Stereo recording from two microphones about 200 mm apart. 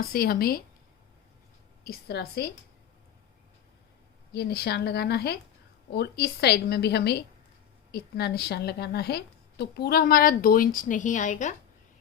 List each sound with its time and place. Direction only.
0.1 s a woman's voice: 50° left (ahead or behind)
1.8 s a woman's voice: 50° left (ahead or behind)
4.3 s a woman's voice: 55° left (ahead or behind); by 11.5 s 35° left (ahead or behind)